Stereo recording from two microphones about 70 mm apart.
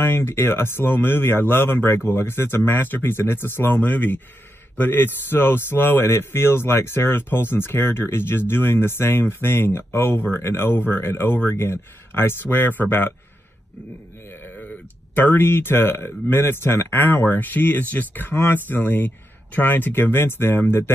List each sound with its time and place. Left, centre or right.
0.0 s a man's voice: left
14.3 s a man's voice: left